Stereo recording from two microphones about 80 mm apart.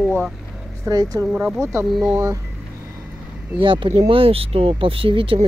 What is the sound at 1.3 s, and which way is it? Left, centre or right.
Speech, centre.